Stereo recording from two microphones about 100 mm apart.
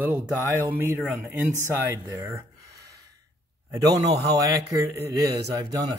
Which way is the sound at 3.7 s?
35° right (ahead or behind).